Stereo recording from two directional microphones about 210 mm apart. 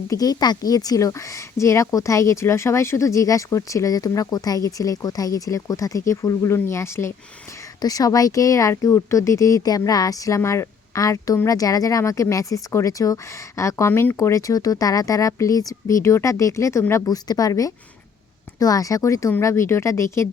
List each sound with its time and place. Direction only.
0.1 s speech: 20° left (ahead or behind)